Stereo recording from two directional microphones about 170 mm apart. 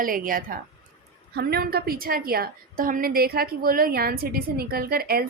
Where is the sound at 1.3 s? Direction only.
70° right (ahead or behind).